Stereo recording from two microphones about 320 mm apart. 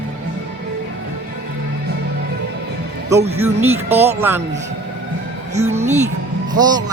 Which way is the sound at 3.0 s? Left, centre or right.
Centre.